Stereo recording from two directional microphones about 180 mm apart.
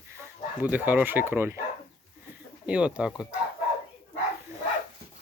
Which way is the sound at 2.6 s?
5° right (ahead or behind).